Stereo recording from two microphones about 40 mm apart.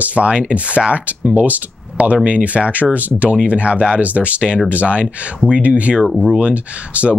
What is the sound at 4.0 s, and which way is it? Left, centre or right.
Speech, right.